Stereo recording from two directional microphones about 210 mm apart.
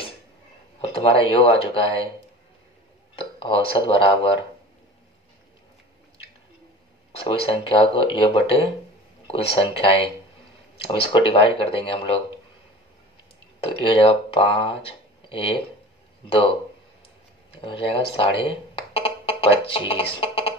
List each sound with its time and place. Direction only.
0.7 s speech: 25° left (ahead or behind)
3.2 s speech: 25° left (ahead or behind)
7.1 s speech: 25° left (ahead or behind)
13.7 s speech: 25° left (ahead or behind)
17.6 s music: 25° left (ahead or behind)